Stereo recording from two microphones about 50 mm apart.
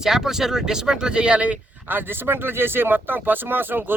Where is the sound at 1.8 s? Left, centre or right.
Right.